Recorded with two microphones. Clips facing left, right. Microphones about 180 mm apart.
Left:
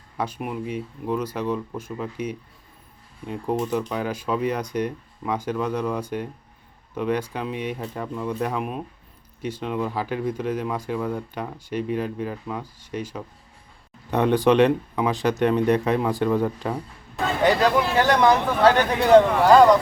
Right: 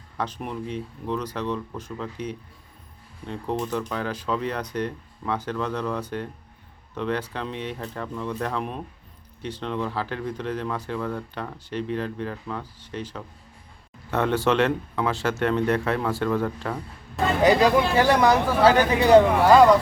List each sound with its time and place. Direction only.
0.2 s speech: 10° left (ahead or behind)
17.4 s speech: 10° right (ahead or behind)